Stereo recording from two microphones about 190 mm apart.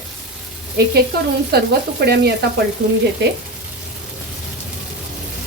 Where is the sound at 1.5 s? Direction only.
55° right (ahead or behind).